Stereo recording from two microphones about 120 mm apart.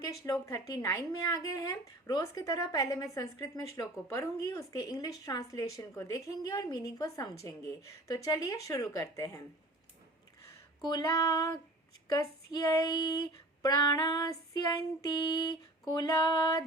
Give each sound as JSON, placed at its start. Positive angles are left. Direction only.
{"t": 0.1, "sound": "speech", "side_deg": 25}
{"t": 10.8, "sound": "female singing", "side_deg": 35}